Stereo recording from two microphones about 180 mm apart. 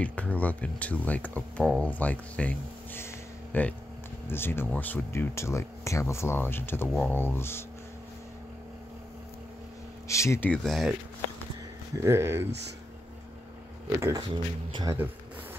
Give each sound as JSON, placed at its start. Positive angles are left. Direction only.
{"t": 0.0, "sound": "speech", "side_deg": 10}
{"t": 10.0, "sound": "speech", "side_deg": 15}
{"t": 10.5, "sound": "speech", "side_deg": 0}
{"t": 12.0, "sound": "speech", "side_deg": -15}
{"t": 13.8, "sound": "speech", "side_deg": -15}